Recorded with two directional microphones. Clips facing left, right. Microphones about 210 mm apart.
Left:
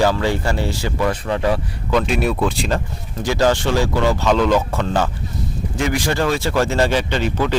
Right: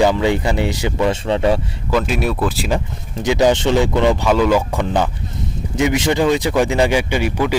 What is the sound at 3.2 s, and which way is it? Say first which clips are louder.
Speech: right 3 dB; 20° right (ahead or behind).